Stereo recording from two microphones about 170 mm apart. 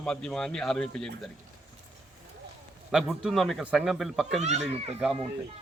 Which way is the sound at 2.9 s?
5° right (ahead or behind).